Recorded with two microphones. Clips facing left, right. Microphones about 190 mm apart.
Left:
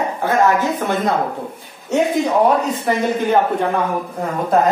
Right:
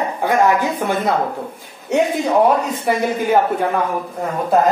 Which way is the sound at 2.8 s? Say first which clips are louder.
Even; 5° right (ahead or behind).